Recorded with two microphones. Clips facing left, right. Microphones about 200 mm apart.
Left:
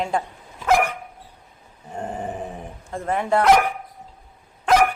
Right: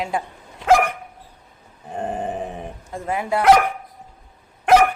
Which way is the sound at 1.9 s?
20° right (ahead or behind).